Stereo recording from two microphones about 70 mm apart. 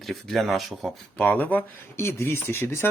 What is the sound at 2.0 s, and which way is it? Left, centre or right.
Speech, left.